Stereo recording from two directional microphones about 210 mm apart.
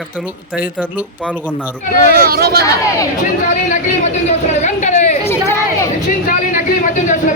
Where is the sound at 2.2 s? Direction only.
45° right (ahead or behind).